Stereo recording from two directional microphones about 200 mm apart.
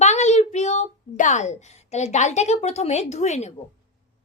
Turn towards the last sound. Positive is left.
turn(degrees=35)  # may be behind; listen again after turning